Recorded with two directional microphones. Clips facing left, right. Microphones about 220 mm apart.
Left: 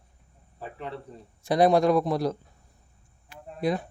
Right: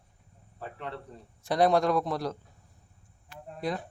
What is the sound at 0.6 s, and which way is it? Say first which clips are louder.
Cricket: left 2 dB; 5° left (ahead or behind).